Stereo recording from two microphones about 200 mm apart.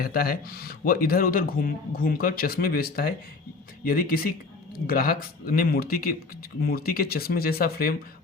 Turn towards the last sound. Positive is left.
turn(degrees=50)  # may be behind; listen again after turning